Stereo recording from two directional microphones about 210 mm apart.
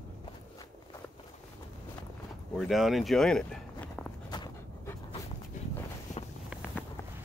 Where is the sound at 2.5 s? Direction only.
Centre (ahead or behind).